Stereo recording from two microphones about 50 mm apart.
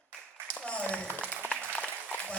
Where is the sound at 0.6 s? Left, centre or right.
Left.